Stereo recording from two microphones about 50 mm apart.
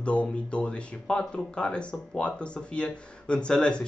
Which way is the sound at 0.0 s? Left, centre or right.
Left.